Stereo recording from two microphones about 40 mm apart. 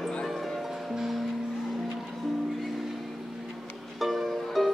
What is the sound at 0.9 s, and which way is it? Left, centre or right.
Music, centre.